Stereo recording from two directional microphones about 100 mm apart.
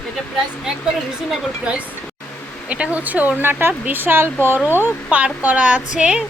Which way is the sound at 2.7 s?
15° right (ahead or behind).